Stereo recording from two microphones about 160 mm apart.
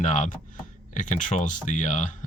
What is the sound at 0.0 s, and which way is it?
Speech, 55° left (ahead or behind).